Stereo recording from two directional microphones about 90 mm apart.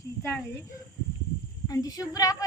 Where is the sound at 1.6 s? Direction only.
45° left (ahead or behind).